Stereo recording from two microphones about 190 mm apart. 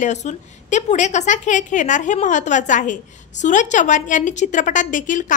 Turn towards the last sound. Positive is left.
turn(degrees=40)  # may be behind; listen again after turning